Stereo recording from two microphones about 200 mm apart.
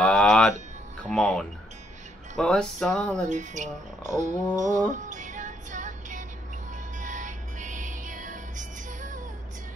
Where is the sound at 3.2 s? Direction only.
35° right (ahead or behind).